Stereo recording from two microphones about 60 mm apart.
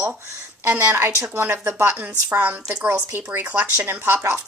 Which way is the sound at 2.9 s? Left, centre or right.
Right.